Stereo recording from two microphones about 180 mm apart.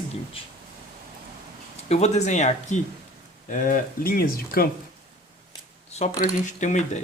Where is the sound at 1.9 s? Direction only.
40° left (ahead or behind); by 4.6 s 55° left (ahead or behind).